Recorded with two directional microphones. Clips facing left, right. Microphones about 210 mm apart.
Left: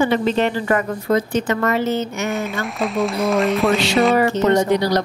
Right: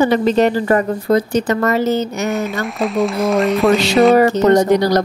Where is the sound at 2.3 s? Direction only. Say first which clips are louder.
Right 3 dB; centre (ahead or behind).